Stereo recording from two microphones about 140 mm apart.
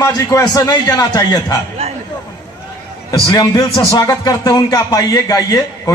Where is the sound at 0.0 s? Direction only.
25° left (ahead or behind).